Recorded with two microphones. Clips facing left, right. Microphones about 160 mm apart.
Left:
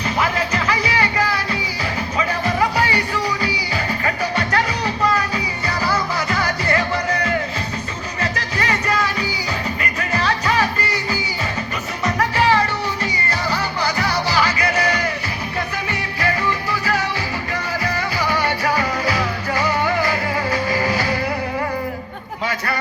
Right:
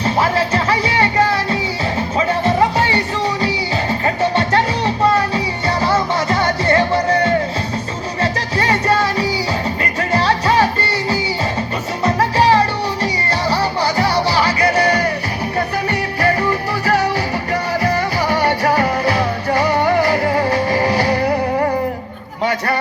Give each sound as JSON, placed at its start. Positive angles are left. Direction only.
{"t": 0.0, "sound": "music", "side_deg": -30}
{"t": 4.0, "sound": "music", "side_deg": -30}